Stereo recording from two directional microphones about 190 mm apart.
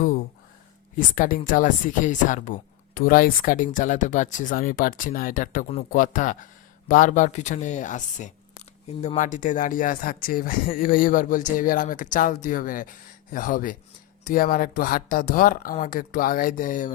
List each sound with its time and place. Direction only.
0.9 s speech: 45° left (ahead or behind)